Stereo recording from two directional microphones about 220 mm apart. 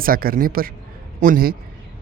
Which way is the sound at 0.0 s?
40° right (ahead or behind).